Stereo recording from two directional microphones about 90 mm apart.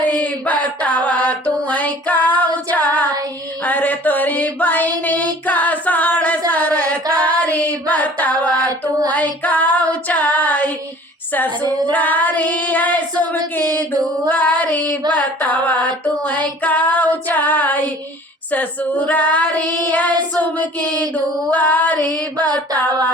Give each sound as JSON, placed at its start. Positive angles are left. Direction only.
{"t": 0.0, "sound": "mantra", "side_deg": 15}
{"t": 3.6, "sound": "a sound", "side_deg": 20}
{"t": 7.1, "sound": "female singing", "side_deg": 15}
{"t": 9.1, "sound": "child singing", "side_deg": 15}
{"t": 10.1, "sound": "female singing", "side_deg": 20}
{"t": 11.9, "sound": "female singing", "side_deg": 15}
{"t": 14.3, "sound": "child singing", "side_deg": 15}
{"t": 15.1, "sound": "female singing", "side_deg": 20}